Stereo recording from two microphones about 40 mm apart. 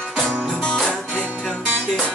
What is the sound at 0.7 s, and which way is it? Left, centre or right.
Music, centre.